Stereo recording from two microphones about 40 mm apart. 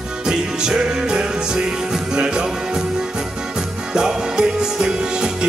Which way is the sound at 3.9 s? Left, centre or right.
Centre.